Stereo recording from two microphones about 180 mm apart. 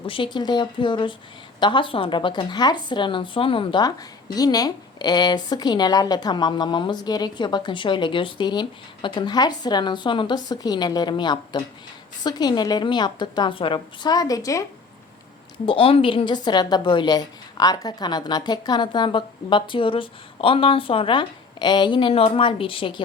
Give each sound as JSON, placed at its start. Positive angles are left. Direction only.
{"t": 0.0, "sound": "a woman's voice", "side_deg": 30}
{"t": 15.6, "sound": "a woman's voice", "side_deg": 30}